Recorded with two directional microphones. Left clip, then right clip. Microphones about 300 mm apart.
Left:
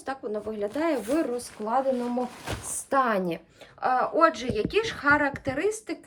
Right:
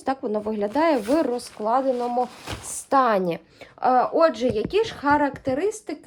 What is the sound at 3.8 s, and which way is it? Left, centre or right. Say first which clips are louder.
A woman's voice: right 4 dB; centre.